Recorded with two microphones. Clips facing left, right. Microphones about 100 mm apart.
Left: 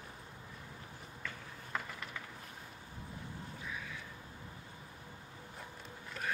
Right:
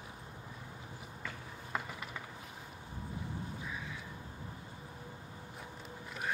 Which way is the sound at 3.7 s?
15° right (ahead or behind).